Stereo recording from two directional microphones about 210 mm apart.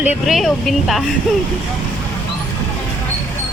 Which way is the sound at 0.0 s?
5° right (ahead or behind).